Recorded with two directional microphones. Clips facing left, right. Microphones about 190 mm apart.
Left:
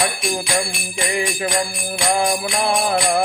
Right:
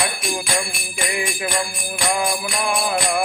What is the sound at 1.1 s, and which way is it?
Jingle bell, 35° left (ahead or behind).